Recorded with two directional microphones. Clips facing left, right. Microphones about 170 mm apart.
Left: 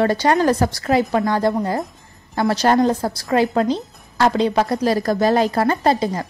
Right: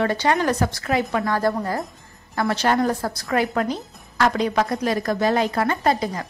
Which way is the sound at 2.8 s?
20° left (ahead or behind).